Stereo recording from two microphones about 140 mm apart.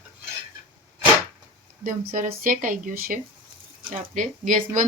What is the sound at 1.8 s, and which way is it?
Speech, 90° right.